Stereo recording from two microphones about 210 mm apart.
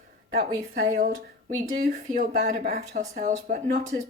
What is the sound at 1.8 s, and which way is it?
Speech, 35° right (ahead or behind).